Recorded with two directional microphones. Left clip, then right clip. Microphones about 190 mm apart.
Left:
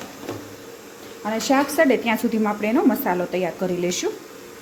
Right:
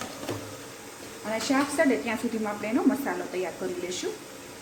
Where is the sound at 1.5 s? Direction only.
55° left (ahead or behind).